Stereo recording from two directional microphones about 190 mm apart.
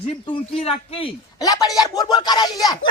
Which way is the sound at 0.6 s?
30° left (ahead or behind).